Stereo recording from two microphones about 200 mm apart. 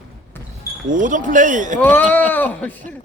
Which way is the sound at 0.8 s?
40° right (ahead or behind).